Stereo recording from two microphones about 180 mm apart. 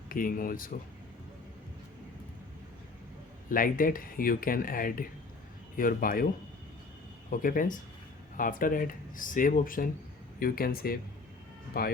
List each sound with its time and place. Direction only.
0.1 s speech: 50° left (ahead or behind)
3.5 s speech: 50° left (ahead or behind)
7.3 s speech: 50° left (ahead or behind)